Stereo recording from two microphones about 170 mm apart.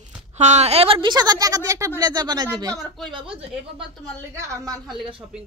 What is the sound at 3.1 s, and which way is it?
Speech, 30° right (ahead or behind).